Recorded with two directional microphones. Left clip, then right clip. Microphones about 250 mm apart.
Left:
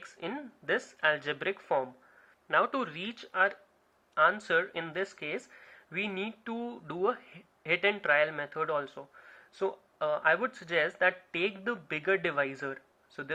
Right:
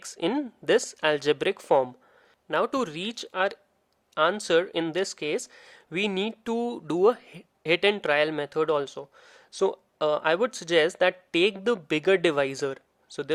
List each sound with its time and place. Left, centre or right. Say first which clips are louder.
0.2 s speech: right 12 dB; right